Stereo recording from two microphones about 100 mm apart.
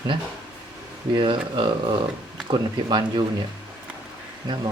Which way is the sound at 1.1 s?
60° right (ahead or behind).